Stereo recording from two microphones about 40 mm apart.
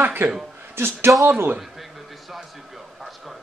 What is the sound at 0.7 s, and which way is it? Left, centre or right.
Speech, right.